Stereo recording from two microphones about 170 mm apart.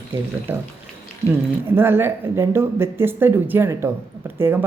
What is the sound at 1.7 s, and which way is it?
Speech, 15° right (ahead or behind).